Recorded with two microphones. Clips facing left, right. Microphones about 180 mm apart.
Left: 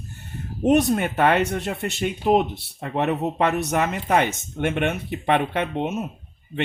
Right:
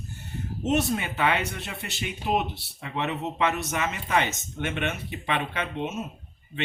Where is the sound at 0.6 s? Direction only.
55° left (ahead or behind).